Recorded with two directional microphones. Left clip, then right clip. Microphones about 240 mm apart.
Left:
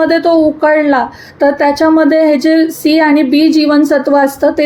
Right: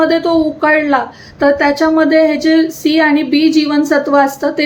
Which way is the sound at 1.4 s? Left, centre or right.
Centre.